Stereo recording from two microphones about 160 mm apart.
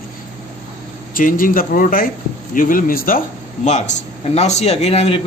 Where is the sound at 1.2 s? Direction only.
60° left (ahead or behind).